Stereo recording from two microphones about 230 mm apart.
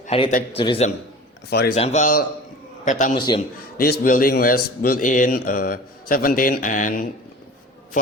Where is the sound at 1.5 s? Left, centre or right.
Left.